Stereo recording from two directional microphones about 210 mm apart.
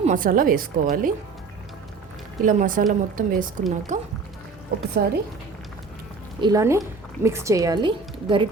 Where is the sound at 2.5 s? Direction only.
40° right (ahead or behind).